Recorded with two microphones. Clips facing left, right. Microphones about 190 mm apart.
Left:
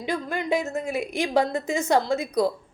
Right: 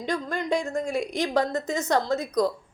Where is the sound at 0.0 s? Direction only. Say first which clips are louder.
Left 1 dB; 10° left (ahead or behind).